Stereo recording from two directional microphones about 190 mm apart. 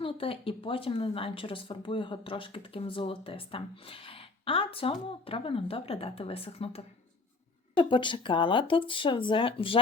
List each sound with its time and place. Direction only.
0.0 s speech: 30° left (ahead or behind)